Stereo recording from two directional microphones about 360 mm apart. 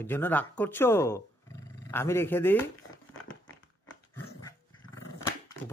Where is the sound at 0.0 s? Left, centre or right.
Centre.